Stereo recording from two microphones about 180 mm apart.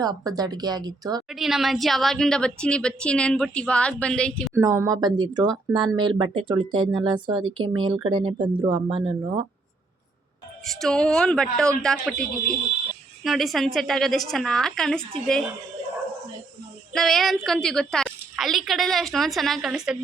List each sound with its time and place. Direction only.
0.0 s speech: 20° right (ahead or behind)
1.3 s a woman's voice: centre (ahead or behind)
4.5 s speech: 15° right (ahead or behind)
10.7 s a woman's voice: centre (ahead or behind)
16.9 s a woman's voice: centre (ahead or behind)